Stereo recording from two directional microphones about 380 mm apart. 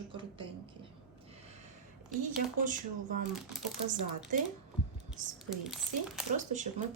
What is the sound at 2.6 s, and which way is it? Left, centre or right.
Speech, right.